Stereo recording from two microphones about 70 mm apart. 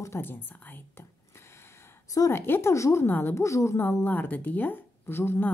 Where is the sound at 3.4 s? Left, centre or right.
Left.